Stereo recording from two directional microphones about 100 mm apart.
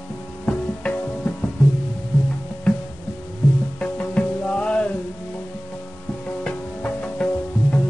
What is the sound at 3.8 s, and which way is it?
Music, 10° left (ahead or behind).